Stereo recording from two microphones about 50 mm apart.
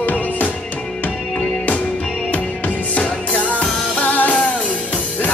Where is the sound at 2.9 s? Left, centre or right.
Left.